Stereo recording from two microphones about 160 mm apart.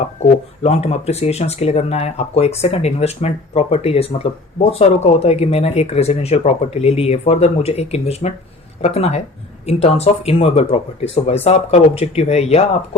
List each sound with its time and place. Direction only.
0.2 s speech: 40° left (ahead or behind)